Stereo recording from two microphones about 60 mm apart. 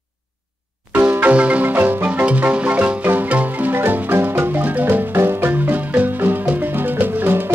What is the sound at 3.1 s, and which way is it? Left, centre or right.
Music, right.